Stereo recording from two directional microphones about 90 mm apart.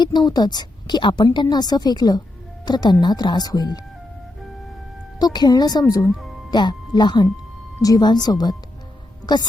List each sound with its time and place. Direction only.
0.0 s a woman's voice: 55° left (ahead or behind)
5.2 s a woman's voice: 50° left (ahead or behind)